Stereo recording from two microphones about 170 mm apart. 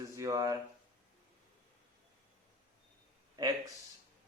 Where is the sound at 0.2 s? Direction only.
20° right (ahead or behind).